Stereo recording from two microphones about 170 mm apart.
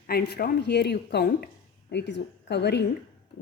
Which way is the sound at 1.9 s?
85° left.